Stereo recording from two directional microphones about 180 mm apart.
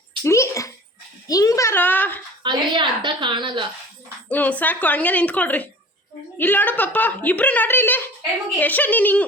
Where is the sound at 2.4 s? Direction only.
25° right (ahead or behind).